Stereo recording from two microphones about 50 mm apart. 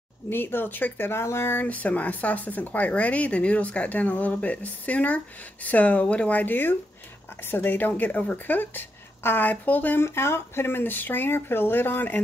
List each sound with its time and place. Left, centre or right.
0.3 s speech: left
1.6 s speech: left
6.4 s speech: left
9.9 s speech: left